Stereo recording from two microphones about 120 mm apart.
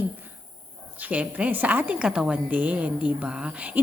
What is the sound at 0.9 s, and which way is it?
A woman's voice, 15° right (ahead or behind).